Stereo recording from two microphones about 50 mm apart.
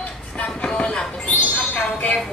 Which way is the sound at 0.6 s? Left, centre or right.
Centre.